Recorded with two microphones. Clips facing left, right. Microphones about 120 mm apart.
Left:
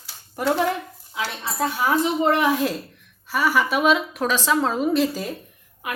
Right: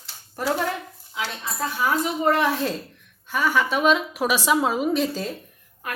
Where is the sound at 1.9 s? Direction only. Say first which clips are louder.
Left 2 dB; 25° left (ahead or behind); by 4.8 s 10° right (ahead or behind).